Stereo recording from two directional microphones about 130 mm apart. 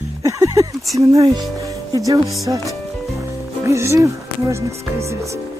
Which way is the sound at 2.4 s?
25° right (ahead or behind).